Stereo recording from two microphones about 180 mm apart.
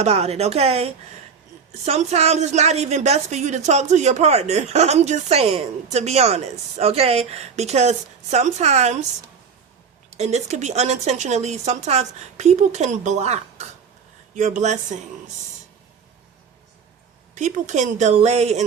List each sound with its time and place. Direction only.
0.0 s a woman's voice: 35° right (ahead or behind)
10.2 s a woman's voice: 40° right (ahead or behind)
17.3 s a woman's voice: 40° right (ahead or behind)